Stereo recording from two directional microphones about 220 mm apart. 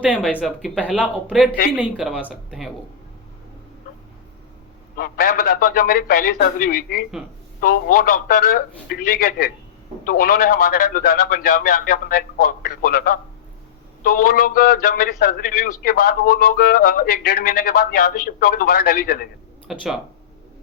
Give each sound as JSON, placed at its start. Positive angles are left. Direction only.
{"t": 0.0, "sound": "speech", "side_deg": -5}
{"t": 3.9, "sound": "a sound", "side_deg": 40}
{"t": 4.9, "sound": "speech", "side_deg": 40}
{"t": 19.7, "sound": "speech", "side_deg": 0}